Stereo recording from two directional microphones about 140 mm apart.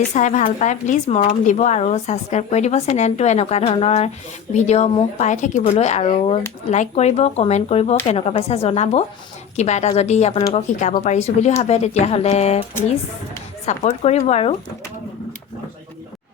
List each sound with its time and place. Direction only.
0.1 s speech: 60° left (ahead or behind)
13.7 s speech: 55° left (ahead or behind)